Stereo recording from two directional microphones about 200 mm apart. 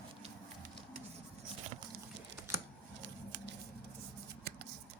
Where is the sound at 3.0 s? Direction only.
60° right (ahead or behind).